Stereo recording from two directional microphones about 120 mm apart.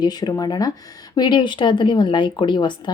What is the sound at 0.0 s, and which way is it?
Speech, 35° left (ahead or behind).